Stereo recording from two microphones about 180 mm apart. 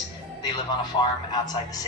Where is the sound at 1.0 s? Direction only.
20° left (ahead or behind).